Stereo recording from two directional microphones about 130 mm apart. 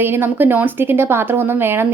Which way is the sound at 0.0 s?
15° right (ahead or behind).